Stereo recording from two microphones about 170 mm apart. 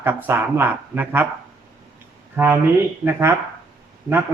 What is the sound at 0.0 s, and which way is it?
A man's voice, 10° right (ahead or behind).